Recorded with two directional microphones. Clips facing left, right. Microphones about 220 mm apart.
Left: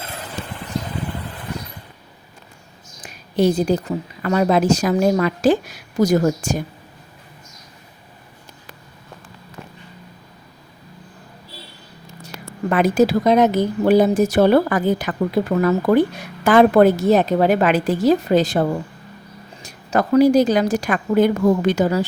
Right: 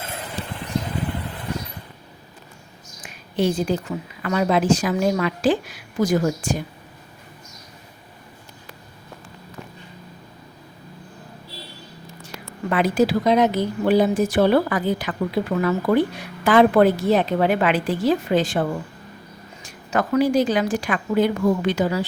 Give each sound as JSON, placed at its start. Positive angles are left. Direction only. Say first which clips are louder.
{"t": 3.0, "sound": "a woman's voice", "louder": "left 4 dB", "side_deg": 40}
{"t": 12.7, "sound": "a woman's voice", "louder": "left 3 dB", "side_deg": 45}